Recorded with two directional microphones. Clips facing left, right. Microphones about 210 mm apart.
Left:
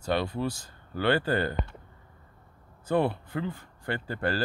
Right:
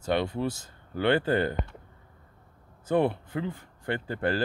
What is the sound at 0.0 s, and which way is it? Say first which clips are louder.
Speech: right 1 dB; 20° right (ahead or behind).